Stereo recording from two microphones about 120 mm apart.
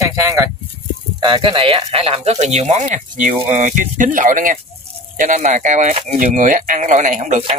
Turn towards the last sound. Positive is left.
turn(degrees=-70)  # may be behind; listen again after turning